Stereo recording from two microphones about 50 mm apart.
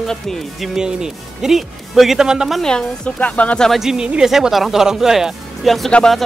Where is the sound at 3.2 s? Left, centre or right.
Left.